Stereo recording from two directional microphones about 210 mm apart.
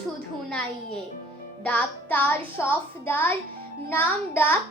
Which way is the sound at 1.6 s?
5° left (ahead or behind).